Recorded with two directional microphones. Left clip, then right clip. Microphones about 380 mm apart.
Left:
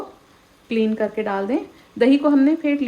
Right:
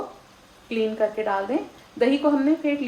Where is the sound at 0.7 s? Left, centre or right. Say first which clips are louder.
Left 2 dB; left.